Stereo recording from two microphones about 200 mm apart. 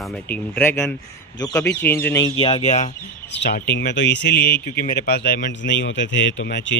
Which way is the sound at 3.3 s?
55° left (ahead or behind).